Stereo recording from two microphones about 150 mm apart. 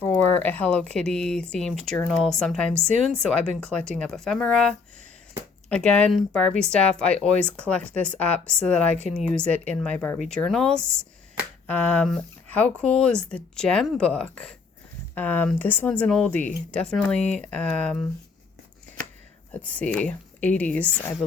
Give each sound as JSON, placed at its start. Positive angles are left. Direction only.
{"t": 0.0, "sound": "speech", "side_deg": 10}
{"t": 4.0, "sound": "speech", "side_deg": 5}
{"t": 19.5, "sound": "speech", "side_deg": 10}